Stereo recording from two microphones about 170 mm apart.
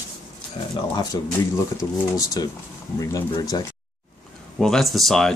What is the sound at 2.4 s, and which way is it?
Speech, 20° left (ahead or behind).